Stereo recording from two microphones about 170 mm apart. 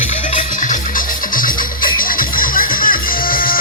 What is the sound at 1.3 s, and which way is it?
Music, 55° left (ahead or behind).